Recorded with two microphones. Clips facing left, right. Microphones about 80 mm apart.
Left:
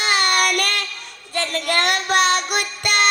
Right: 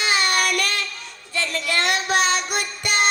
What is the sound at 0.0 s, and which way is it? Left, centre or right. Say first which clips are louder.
Child singing: left 2 dB; left.